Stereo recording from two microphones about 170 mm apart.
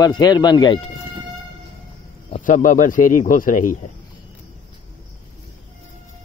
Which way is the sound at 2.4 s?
50° left (ahead or behind).